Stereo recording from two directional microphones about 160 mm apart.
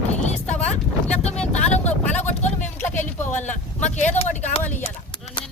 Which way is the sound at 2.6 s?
15° left (ahead or behind).